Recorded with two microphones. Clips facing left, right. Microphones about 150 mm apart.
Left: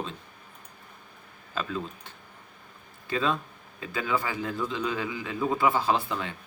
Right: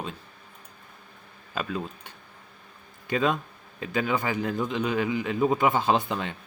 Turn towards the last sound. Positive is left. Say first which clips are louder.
# right 2 dB
turn(degrees=-20)  # may be behind; listen again after turning